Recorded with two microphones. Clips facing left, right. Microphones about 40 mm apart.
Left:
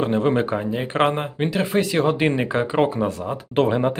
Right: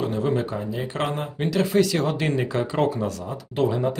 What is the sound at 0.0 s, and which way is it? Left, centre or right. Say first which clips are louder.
Speech: left 4 dB; left.